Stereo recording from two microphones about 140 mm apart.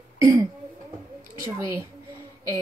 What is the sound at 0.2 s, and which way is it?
Throat clearing, 20° right (ahead or behind).